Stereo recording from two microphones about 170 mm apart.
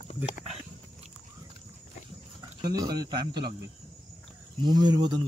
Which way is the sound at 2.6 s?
25° right (ahead or behind).